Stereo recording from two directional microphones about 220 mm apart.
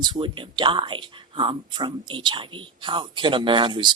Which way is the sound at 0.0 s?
20° right (ahead or behind).